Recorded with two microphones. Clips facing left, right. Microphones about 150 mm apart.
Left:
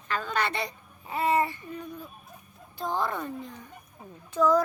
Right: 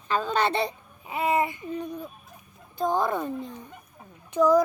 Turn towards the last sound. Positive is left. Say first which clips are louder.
# right 3 dB
turn(degrees=-15)  # may be behind; listen again after turning